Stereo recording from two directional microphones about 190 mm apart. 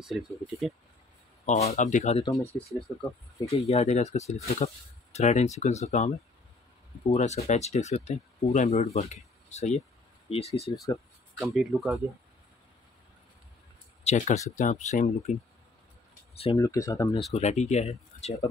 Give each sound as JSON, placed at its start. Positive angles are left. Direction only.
{"t": 0.0, "sound": "speech", "side_deg": 0}
{"t": 1.4, "sound": "speech", "side_deg": 35}
{"t": 2.3, "sound": "speech", "side_deg": 0}
{"t": 3.5, "sound": "speech", "side_deg": 35}
{"t": 11.3, "sound": "speech", "side_deg": 0}
{"t": 14.0, "sound": "speech", "side_deg": 40}
{"t": 16.5, "sound": "speech", "side_deg": 15}
{"t": 17.3, "sound": "speech", "side_deg": 35}